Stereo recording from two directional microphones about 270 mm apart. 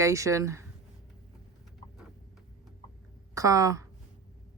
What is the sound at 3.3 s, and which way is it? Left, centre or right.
Speech, centre.